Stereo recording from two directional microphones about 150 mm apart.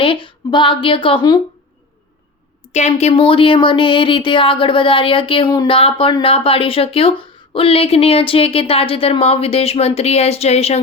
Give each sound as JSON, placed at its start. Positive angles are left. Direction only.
{"t": 0.0, "sound": "speech", "side_deg": 35}
{"t": 2.7, "sound": "speech", "side_deg": 50}